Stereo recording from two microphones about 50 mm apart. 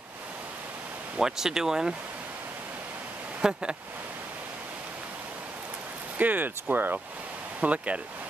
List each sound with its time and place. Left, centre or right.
1.1 s speech: centre
3.3 s speech: right
6.1 s speech: right
7.6 s speech: right